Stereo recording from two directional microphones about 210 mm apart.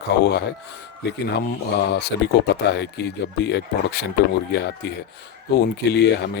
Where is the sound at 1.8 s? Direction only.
50° left (ahead or behind).